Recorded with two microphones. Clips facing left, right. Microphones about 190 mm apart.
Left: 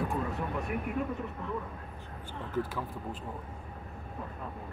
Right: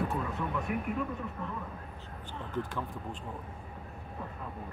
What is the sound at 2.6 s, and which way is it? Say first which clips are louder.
Speech: left 3 dB; 5° left (ahead or behind).